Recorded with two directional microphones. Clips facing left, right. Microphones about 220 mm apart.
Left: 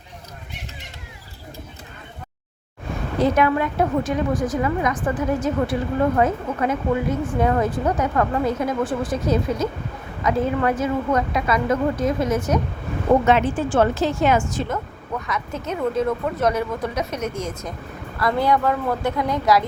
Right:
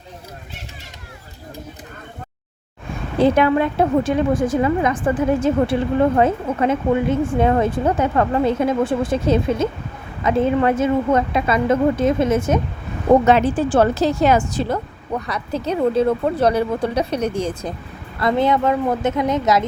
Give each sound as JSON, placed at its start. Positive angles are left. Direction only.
{"t": 3.2, "sound": "a woman's voice", "side_deg": -30}
{"t": 13.2, "sound": "a woman's voice", "side_deg": -35}